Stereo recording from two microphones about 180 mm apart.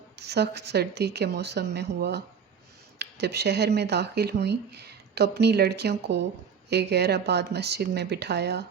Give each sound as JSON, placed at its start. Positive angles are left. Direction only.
{"t": 0.2, "sound": "speech", "side_deg": -65}